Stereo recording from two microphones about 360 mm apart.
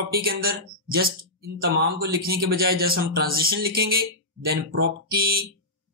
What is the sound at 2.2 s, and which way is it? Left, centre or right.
Speech, right.